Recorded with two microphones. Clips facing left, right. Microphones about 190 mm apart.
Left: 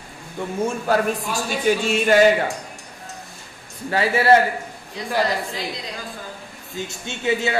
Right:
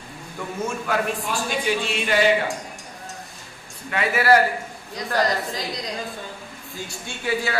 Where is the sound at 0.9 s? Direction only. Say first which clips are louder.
Left 4 dB; 35° left (ahead or behind).